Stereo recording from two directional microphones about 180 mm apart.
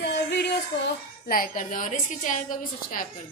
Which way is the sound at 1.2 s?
50° left (ahead or behind).